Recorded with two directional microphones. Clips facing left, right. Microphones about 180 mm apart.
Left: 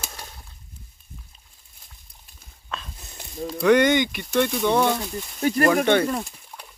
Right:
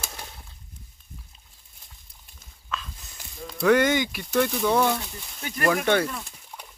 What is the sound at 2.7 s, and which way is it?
Dog, 35° left (ahead or behind).